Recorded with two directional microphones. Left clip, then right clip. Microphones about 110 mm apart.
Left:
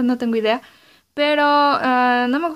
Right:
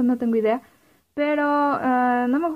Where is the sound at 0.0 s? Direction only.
30° left (ahead or behind).